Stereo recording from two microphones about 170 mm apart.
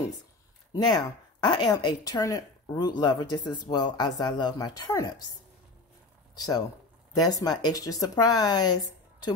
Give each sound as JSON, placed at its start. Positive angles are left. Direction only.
{"t": 0.8, "sound": "speech", "side_deg": 25}
{"t": 6.3, "sound": "speech", "side_deg": 20}